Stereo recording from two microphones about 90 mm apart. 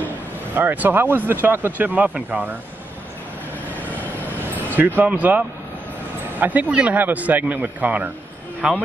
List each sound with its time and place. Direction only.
0.6 s speech: 20° right (ahead or behind)
4.7 s speech: 20° right (ahead or behind)